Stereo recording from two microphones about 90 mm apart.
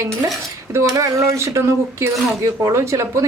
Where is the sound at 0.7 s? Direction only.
35° right (ahead or behind).